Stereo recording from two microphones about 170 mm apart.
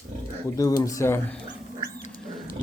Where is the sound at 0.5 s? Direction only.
20° left (ahead or behind).